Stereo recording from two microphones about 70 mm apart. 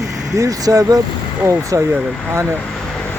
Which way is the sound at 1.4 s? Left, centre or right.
Right.